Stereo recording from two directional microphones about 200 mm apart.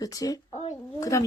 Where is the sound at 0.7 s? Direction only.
15° left (ahead or behind).